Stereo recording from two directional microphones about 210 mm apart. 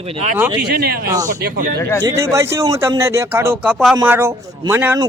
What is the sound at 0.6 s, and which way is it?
Speech, 50° right (ahead or behind).